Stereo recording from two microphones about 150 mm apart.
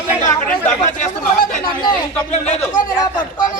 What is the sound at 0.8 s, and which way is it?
Speech, 55° left (ahead or behind).